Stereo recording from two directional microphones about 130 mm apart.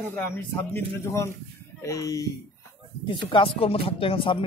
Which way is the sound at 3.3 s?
45° left (ahead or behind).